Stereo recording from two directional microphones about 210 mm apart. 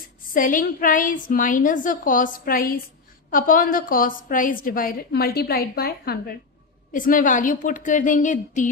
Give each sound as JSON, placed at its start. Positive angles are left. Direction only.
{"t": 0.3, "sound": "a woman's voice", "side_deg": 40}